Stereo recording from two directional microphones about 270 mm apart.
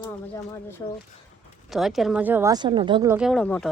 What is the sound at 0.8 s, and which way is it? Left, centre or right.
Speech, centre.